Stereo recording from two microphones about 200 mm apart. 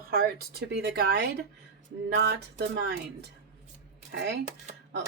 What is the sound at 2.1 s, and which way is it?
Music, 55° right (ahead or behind).